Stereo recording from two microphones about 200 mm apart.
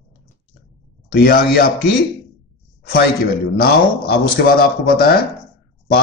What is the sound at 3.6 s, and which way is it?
Speech, 50° left (ahead or behind).